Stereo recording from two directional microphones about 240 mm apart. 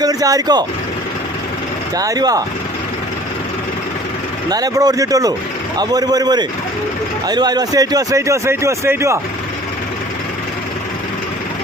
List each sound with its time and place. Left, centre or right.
0.0 s speech: centre
2.0 s speech: centre
4.4 s speech: centre